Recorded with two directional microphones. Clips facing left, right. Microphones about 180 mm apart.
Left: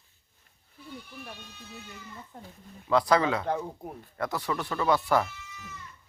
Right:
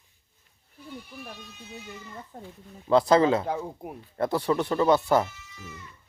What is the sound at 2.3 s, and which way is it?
Speech, 40° right (ahead or behind).